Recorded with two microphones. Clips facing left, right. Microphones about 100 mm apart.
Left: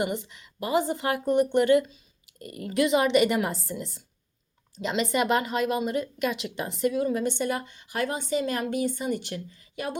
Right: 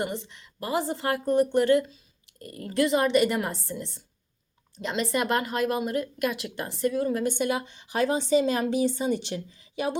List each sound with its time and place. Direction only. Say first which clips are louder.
0.0 s speech: left 2 dB; 5° left (ahead or behind)
7.3 s a woman's voice: right 1 dB; 10° right (ahead or behind)
7.6 s a woman's voice: right 3 dB; 25° right (ahead or behind)